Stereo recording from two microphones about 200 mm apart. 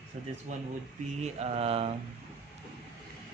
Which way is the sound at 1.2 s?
30° right (ahead or behind).